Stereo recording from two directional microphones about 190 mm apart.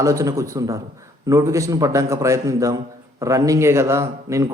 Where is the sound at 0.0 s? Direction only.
15° right (ahead or behind).